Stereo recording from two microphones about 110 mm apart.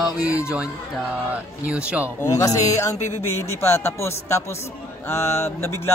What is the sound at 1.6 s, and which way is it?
Speech, 15° right (ahead or behind).